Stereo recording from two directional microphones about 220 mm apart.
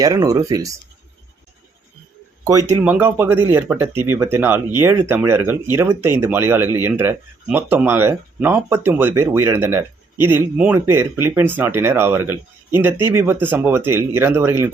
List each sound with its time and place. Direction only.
0.0 s speech: 15° right (ahead or behind)
2.4 s speech: 15° right (ahead or behind)